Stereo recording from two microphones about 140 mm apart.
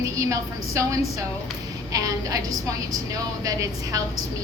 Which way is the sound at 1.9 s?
25° right (ahead or behind).